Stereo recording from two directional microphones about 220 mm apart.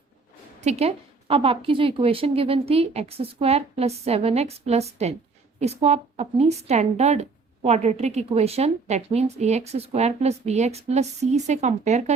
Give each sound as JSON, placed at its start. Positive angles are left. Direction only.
{"t": 0.6, "sound": "a woman's voice", "side_deg": -30}